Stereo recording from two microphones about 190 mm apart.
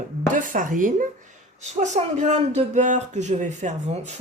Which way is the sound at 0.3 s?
45° right (ahead or behind).